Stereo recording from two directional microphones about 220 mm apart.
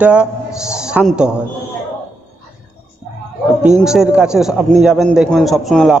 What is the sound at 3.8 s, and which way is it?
A man's voice, 5° right (ahead or behind).